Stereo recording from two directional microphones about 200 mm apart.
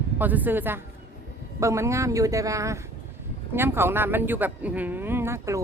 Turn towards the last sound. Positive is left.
turn(degrees=-15)  # may be behind; listen again after turning